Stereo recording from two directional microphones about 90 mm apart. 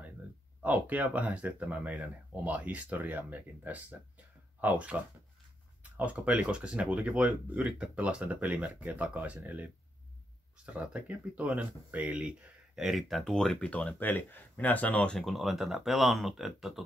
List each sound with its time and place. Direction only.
0.6 s speech: 15° right (ahead or behind)
5.9 s speech: 15° right (ahead or behind)
12.7 s speech: centre (ahead or behind); by 15.1 s 15° left (ahead or behind)
15.1 s speech: centre (ahead or behind)